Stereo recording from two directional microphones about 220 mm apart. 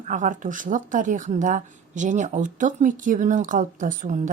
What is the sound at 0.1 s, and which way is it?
Speech, 35° right (ahead or behind).